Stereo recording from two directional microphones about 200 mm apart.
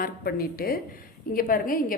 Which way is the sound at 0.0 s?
50° left (ahead or behind).